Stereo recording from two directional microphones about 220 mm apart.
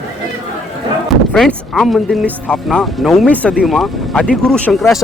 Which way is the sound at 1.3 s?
Centre (ahead or behind).